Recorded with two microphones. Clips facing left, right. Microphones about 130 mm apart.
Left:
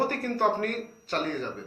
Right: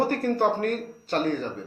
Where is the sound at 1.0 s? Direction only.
40° right (ahead or behind).